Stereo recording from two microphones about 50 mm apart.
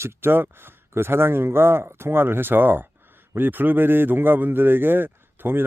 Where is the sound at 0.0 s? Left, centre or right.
Right.